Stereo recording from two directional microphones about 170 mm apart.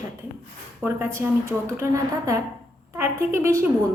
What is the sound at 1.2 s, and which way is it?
A woman's voice, 15° right (ahead or behind).